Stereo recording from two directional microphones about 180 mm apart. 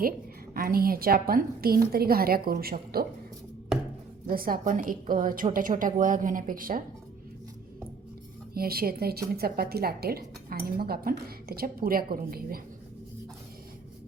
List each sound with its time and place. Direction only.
0.5 s a woman's voice: 55° right (ahead or behind)
4.3 s a woman's voice: 55° right (ahead or behind)
8.5 s a woman's voice: 55° right (ahead or behind)